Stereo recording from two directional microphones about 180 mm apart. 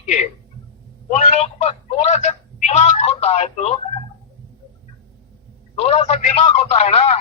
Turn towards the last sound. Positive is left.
turn(degrees=35)  # may be behind; listen again after turning